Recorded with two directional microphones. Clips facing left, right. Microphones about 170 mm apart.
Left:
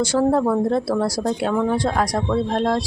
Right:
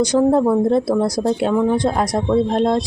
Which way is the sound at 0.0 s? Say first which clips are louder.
Right 3 dB; 20° right (ahead or behind).